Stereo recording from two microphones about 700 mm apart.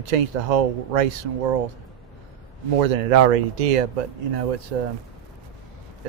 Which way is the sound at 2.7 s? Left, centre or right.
Right.